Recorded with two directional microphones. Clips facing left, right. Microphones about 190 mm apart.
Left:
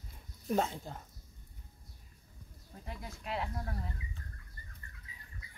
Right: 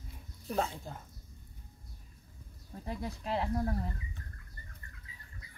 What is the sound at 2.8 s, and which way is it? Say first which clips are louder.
Speech: right 7 dB; 35° right (ahead or behind).